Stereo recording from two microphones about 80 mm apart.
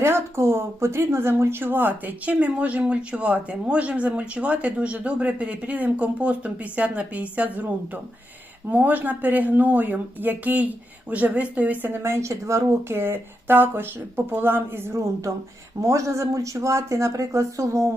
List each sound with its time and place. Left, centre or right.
0.0 s speech: right
8.7 s a woman's voice: centre
12.0 s a woman's voice: right